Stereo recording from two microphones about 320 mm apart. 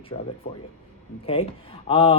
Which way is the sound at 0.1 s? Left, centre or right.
Centre.